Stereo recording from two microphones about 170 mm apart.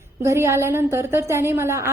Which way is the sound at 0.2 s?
15° right (ahead or behind).